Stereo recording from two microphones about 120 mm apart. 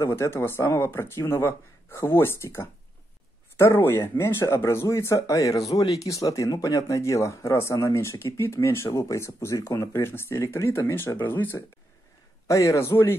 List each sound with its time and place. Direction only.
0.0 s speech: 25° left (ahead or behind)